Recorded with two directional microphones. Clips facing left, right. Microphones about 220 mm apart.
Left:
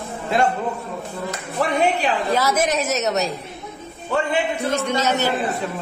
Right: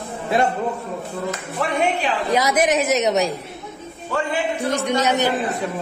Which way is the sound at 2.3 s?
15° right (ahead or behind).